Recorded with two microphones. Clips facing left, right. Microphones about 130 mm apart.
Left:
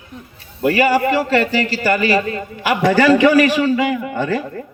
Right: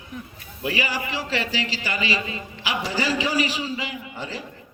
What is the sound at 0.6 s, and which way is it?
A man's voice, 55° left (ahead or behind).